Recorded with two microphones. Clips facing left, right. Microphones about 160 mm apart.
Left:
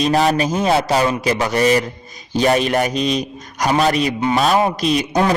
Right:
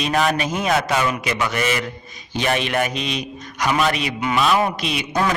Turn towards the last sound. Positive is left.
turn(degrees=40)  # may be behind; listen again after turning